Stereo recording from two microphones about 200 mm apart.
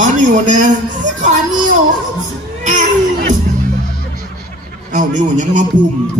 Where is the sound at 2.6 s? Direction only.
40° right (ahead or behind).